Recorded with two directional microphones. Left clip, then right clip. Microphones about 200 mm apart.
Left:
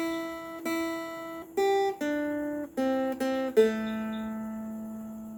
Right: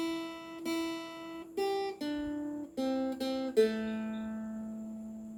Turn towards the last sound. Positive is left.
turn(degrees=15)  # may be behind; listen again after turning